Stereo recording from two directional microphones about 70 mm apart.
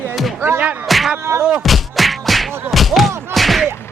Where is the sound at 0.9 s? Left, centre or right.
Centre.